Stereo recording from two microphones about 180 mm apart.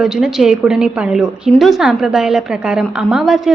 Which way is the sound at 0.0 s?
5° right (ahead or behind).